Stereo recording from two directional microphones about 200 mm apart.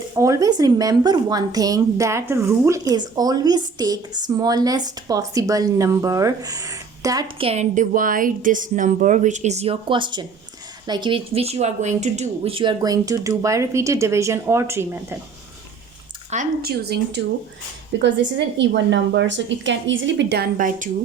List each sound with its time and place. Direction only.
0.2 s a woman's voice: 15° right (ahead or behind)
16.3 s speech: 45° right (ahead or behind)
18.0 s a woman's voice: 60° right (ahead or behind); by 20.9 s 40° right (ahead or behind)